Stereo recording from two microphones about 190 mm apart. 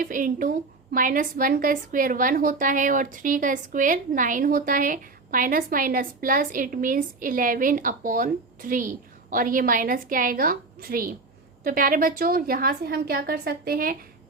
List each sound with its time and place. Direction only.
0.0 s a woman's voice: 45° right (ahead or behind)